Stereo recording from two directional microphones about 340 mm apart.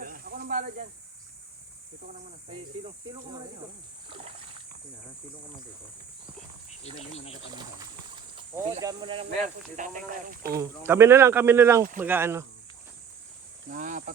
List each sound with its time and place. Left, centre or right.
0.0 s snake: right
2.5 s speech: centre
6.7 s speech: centre
8.1 s speech: centre
10.5 s speech: centre
13.7 s speech: right